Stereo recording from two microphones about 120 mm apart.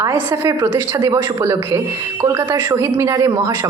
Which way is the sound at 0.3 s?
25° right (ahead or behind).